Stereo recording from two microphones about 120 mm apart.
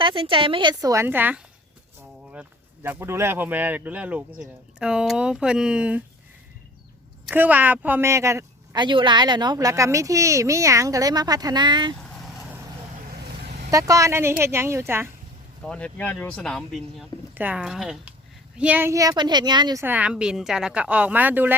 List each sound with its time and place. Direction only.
0.0 s a woman's voice: 45° right (ahead or behind); by 1.0 s 30° right (ahead or behind)
1.0 s speech: 15° right (ahead or behind)
7.3 s speech: 15° right (ahead or behind)
8.7 s a woman's voice: 40° right (ahead or behind)
12.1 s vehicle: centre (ahead or behind)
13.7 s speech: 25° right (ahead or behind)
15.6 s speech: 10° left (ahead or behind)
17.3 s speech: 15° right (ahead or behind)
18.9 s a woman's voice: 35° right (ahead or behind)
19.8 s speech: 15° right (ahead or behind)